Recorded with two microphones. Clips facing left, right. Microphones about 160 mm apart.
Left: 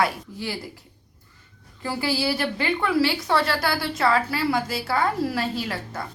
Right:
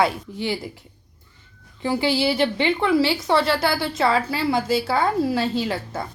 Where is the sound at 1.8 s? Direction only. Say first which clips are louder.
Right 4 dB; 25° right (ahead or behind).